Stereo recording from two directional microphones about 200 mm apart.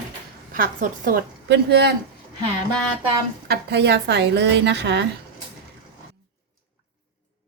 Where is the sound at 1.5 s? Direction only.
55° right (ahead or behind).